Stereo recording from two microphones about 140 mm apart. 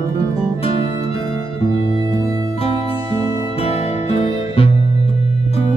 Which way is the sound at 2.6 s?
45° left (ahead or behind).